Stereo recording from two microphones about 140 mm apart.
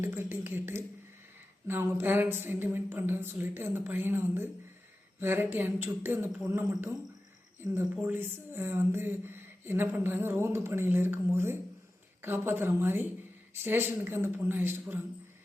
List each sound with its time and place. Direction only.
0.0 s speech: 15° right (ahead or behind)